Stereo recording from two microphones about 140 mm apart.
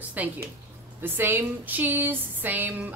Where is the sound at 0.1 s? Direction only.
10° right (ahead or behind).